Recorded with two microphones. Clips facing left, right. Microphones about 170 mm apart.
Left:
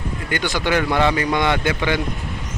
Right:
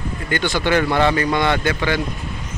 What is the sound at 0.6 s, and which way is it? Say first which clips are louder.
Speech: right 1 dB; 10° left (ahead or behind).